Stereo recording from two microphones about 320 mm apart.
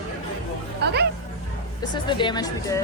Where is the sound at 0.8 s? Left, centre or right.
Right.